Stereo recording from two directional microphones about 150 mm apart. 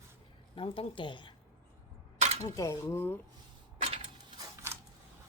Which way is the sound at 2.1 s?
50° right (ahead or behind).